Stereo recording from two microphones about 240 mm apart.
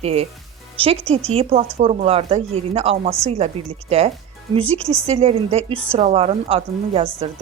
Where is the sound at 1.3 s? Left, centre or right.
Right.